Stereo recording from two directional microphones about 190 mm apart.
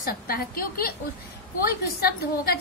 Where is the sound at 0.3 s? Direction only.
50° left (ahead or behind).